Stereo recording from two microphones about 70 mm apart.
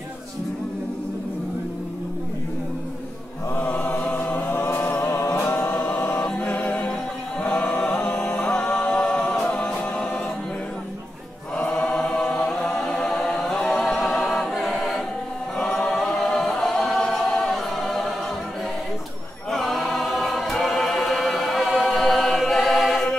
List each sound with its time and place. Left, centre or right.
3.5 s chant: centre
4.6 s choir: left
5.3 s singing: centre
5.6 s music: left
5.9 s choir: left
6.2 s a capella: centre
11.5 s choir: centre
19.5 s choir: centre